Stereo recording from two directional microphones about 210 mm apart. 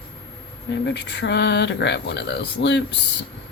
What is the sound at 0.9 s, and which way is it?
Speech, 55° left (ahead or behind).